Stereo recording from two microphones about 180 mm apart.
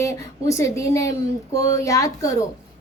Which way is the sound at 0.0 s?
15° left (ahead or behind).